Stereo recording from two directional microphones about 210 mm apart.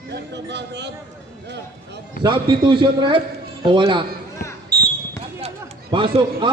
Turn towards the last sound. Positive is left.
turn(degrees=-25)  # may be behind; listen again after turning